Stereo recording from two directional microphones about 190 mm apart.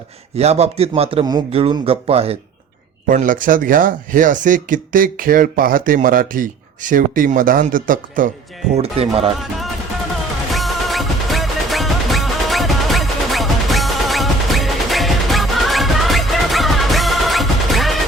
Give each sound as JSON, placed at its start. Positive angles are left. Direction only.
{"t": 0.3, "sound": "a man's voice", "side_deg": -35}
{"t": 3.1, "sound": "speech", "side_deg": -45}
{"t": 8.7, "sound": "a man's voice", "side_deg": -30}
{"t": 9.4, "sound": "music", "side_deg": 0}